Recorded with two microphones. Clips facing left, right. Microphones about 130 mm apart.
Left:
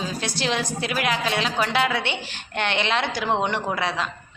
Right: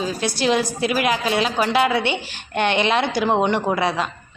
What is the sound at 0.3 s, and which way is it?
A woman's voice, 10° right (ahead or behind).